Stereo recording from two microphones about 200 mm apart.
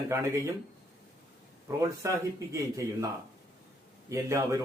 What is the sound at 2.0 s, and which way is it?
Speech, 15° right (ahead or behind).